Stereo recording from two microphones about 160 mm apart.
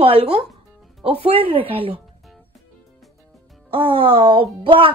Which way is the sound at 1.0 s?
40° right (ahead or behind).